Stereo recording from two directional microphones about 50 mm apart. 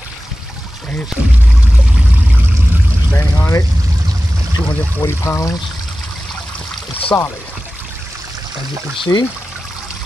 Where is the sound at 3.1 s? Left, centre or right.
Left.